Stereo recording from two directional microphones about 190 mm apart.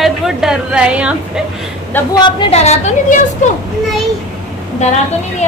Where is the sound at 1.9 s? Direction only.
20° left (ahead or behind); by 3.2 s 35° left (ahead or behind).